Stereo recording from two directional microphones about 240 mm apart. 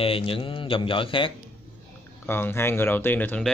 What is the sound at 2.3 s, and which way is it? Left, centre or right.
Speech, centre.